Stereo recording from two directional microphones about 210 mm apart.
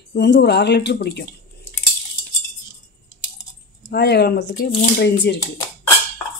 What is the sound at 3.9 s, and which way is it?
Speech, 50° left (ahead or behind).